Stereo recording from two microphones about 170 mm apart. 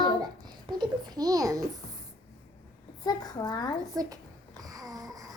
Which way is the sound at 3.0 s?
25° left (ahead or behind).